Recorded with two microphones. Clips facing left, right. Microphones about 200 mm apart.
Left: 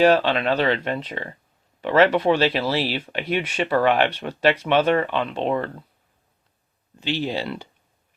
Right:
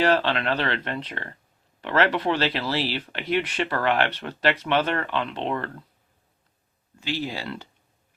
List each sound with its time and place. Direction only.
0.0 s speech: 15° left (ahead or behind)
7.0 s speech: 20° left (ahead or behind)